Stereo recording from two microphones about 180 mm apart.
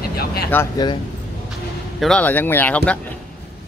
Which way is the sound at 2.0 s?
5° left (ahead or behind).